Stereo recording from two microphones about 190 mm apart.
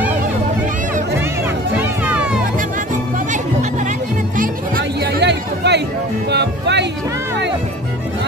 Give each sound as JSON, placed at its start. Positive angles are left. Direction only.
{"t": 1.8, "sound": "music", "side_deg": -10}
{"t": 4.4, "sound": "music", "side_deg": -50}